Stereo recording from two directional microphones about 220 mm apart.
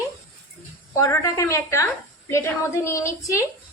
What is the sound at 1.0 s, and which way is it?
A woman's voice, 15° left (ahead or behind).